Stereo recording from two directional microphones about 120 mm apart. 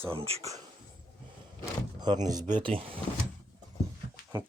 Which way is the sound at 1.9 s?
35° right (ahead or behind).